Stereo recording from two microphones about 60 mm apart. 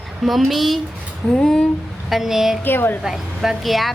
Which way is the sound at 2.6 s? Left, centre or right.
Left.